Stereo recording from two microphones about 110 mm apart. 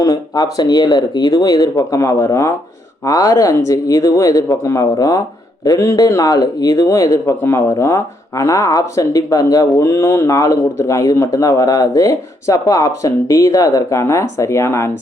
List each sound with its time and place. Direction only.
0.0 s speech: 30° left (ahead or behind)